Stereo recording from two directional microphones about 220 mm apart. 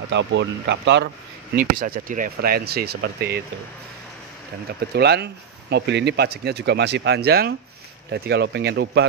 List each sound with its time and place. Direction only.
0.1 s speech: 55° right (ahead or behind)
1.9 s speech: 40° right (ahead or behind)
4.9 s speech: 50° right (ahead or behind)